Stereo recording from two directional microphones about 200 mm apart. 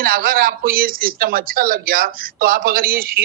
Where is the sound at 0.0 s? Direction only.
45° right (ahead or behind).